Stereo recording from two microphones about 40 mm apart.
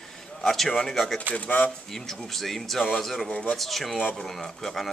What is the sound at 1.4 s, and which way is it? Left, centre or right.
Speech, left.